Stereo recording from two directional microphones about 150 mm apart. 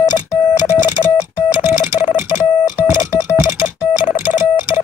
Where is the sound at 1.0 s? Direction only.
40° left (ahead or behind).